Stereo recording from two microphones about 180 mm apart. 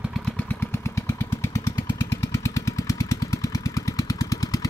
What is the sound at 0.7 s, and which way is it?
Vehicle, 15° left (ahead or behind).